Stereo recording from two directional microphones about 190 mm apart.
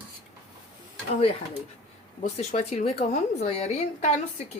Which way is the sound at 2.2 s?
35° left (ahead or behind).